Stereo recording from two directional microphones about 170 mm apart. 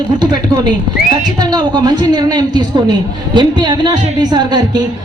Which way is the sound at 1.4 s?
25° right (ahead or behind).